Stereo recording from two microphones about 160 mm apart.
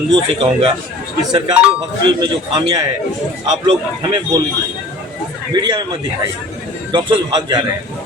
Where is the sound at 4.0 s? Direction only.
25° right (ahead or behind).